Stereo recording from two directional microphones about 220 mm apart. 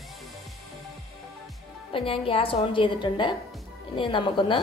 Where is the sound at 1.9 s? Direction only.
25° left (ahead or behind).